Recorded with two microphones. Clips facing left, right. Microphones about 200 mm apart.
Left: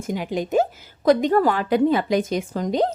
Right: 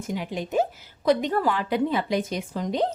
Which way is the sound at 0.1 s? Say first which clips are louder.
Left 5 dB; 45° left (ahead or behind).